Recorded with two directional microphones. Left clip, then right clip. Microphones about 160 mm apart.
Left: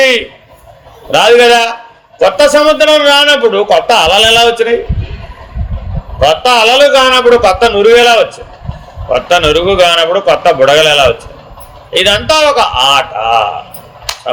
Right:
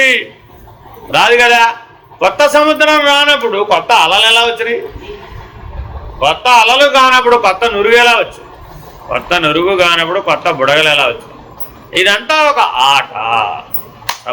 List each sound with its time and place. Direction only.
1.1 s speech: 70° left (ahead or behind)
6.1 s speech: 70° left (ahead or behind)